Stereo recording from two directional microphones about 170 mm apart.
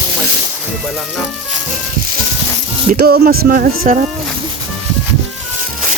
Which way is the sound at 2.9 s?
65° right (ahead or behind).